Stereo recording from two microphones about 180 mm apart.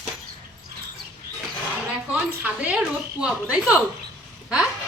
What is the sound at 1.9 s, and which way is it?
A woman's voice, 5° right (ahead or behind).